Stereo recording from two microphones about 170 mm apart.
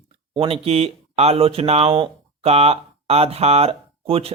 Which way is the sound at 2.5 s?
35° right (ahead or behind).